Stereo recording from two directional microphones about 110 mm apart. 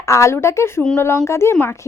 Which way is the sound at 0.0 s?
30° left (ahead or behind).